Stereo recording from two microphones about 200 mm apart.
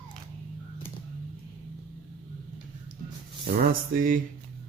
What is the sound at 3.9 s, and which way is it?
Speech, 45° right (ahead or behind).